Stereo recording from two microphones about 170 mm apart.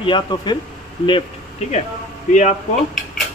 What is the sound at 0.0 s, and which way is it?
Speech, 25° left (ahead or behind).